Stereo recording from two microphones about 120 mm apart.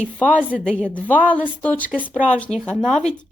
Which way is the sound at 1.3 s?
10° left (ahead or behind).